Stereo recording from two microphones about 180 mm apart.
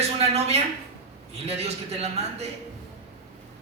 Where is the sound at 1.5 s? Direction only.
35° right (ahead or behind).